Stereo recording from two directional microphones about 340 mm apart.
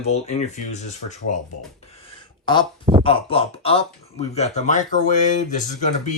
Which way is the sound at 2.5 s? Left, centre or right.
Centre.